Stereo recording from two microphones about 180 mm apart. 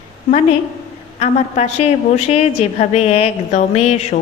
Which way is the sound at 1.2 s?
35° left (ahead or behind).